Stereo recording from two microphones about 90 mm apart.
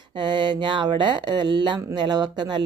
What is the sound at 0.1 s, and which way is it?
Speech, 60° right (ahead or behind).